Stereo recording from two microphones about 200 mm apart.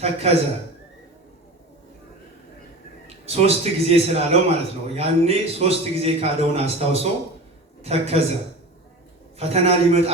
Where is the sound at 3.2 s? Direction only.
30° right (ahead or behind).